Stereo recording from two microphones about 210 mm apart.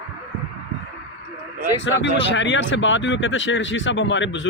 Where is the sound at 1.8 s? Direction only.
60° left (ahead or behind).